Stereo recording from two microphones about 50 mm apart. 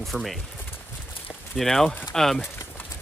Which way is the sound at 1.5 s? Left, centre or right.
Centre.